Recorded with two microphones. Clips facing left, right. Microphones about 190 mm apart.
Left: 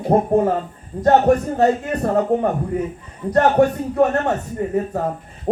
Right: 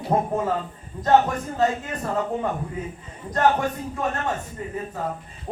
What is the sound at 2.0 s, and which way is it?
Speech, 40° left (ahead or behind).